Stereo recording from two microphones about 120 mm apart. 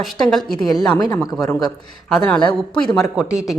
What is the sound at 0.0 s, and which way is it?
Speech, centre (ahead or behind).